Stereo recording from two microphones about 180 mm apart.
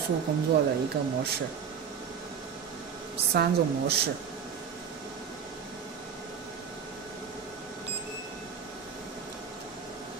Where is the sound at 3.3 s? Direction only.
65° right (ahead or behind).